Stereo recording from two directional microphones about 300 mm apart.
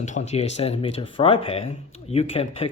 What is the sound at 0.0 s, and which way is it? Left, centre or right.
Speech, left.